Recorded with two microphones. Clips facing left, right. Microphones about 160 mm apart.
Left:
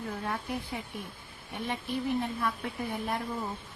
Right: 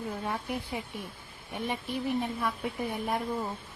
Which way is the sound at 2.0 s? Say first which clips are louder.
Right 1 dB; 10° right (ahead or behind).